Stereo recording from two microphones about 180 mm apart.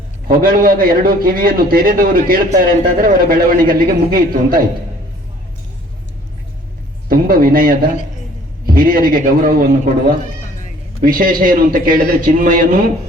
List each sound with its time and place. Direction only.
0.3 s a man's voice: 55° right (ahead or behind)
7.1 s a man's voice: 55° right (ahead or behind)